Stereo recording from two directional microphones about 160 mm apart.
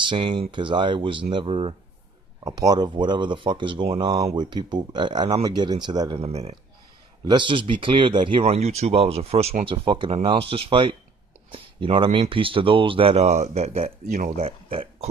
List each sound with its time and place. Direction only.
0.0 s speech: 30° right (ahead or behind)